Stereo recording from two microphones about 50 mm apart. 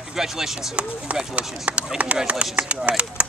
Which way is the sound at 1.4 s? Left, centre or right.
Right.